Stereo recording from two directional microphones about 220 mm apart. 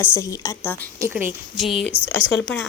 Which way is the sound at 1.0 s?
10° right (ahead or behind).